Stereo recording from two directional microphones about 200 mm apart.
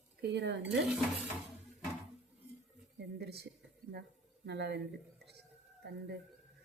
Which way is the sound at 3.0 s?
55° right (ahead or behind).